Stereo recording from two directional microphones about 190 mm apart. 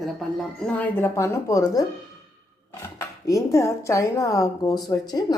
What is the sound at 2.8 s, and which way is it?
Speech, 15° left (ahead or behind).